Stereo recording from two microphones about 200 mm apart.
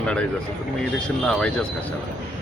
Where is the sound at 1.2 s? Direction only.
5° left (ahead or behind).